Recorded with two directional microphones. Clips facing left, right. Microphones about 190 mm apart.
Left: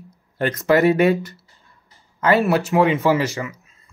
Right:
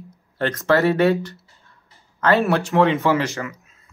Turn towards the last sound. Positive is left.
turn(degrees=15)  # may be behind; listen again after turning